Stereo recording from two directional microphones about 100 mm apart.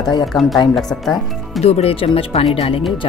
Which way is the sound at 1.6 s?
85° left.